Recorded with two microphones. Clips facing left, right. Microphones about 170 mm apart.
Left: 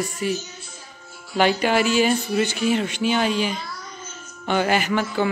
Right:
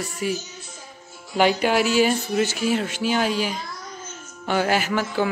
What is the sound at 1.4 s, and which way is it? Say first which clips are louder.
Speech: even; 5° right (ahead or behind).